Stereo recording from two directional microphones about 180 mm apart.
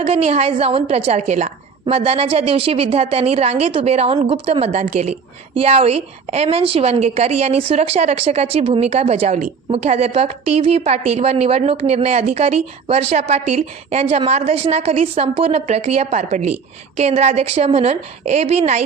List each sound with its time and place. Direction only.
0.0 s a woman's voice: 35° right (ahead or behind)